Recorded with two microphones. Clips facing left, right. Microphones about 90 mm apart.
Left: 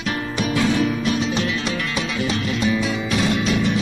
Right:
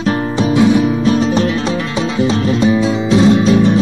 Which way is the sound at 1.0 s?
35° right (ahead or behind).